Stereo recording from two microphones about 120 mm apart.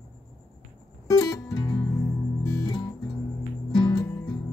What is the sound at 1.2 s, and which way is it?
Music, 30° left (ahead or behind).